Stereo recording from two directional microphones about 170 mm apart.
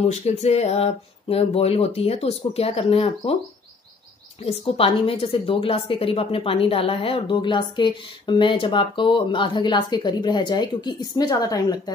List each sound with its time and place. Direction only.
0.1 s speech: 40° left (ahead or behind)
4.4 s a woman's voice: 35° left (ahead or behind)